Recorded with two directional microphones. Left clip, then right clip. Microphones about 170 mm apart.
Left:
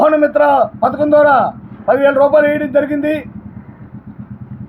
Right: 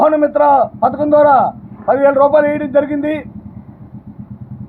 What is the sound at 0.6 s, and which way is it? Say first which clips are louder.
Speech: even; 10° right (ahead or behind).